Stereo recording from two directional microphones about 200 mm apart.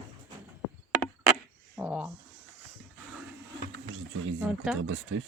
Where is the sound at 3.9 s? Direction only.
75° right (ahead or behind).